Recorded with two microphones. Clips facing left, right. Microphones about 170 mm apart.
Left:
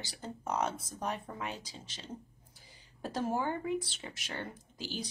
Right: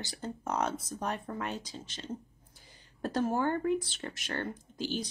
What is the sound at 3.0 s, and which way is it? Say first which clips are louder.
Speech: right 4 dB; 10° left (ahead or behind).